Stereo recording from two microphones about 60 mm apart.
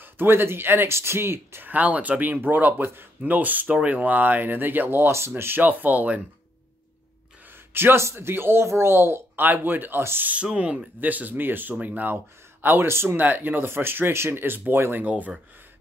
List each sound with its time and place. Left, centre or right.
0.0 s speech: right
1.7 s speech: right
3.3 s speech: right
7.7 s speech: right
10.2 s speech: right
12.6 s speech: right
13.1 s speech: right
15.0 s speech: right